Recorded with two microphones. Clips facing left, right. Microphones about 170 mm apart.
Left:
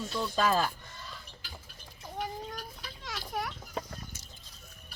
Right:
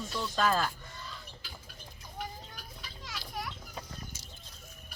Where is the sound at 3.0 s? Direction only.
55° left (ahead or behind).